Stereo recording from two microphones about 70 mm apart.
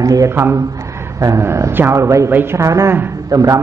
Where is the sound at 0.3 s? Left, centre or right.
Right.